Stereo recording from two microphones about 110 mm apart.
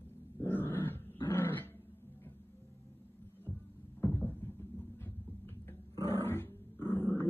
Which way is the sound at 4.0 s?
20° left (ahead or behind).